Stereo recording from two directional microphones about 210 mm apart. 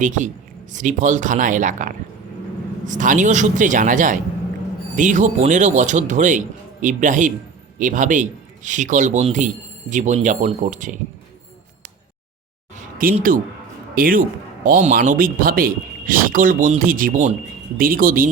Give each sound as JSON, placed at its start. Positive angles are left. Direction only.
{"t": 0.0, "sound": "speech", "side_deg": -35}
{"t": 12.7, "sound": "a sound", "side_deg": -40}
{"t": 13.9, "sound": "speech", "side_deg": -40}